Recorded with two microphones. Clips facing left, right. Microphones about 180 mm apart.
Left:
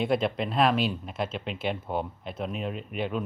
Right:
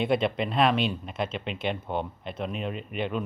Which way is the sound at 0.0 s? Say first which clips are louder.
Right 1 dB; centre (ahead or behind).